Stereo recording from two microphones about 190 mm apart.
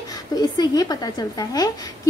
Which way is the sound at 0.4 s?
20° left (ahead or behind).